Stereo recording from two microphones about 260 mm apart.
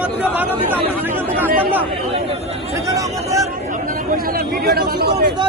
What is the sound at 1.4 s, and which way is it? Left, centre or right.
Speech, centre.